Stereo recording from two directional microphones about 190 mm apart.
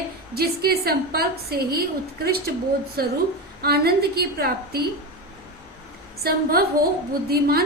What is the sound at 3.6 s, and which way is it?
A woman's voice, 55° right (ahead or behind).